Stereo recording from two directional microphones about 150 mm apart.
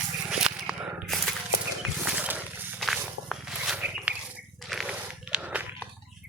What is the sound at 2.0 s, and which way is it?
Wild animals, 10° right (ahead or behind).